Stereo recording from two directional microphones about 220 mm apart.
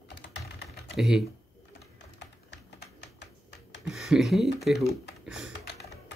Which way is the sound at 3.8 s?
Centre (ahead or behind).